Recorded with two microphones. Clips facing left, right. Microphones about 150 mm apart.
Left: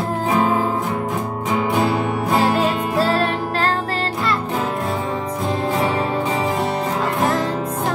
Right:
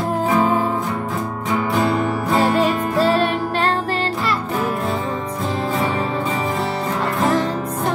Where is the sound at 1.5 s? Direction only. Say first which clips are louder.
Even; 20° left (ahead or behind).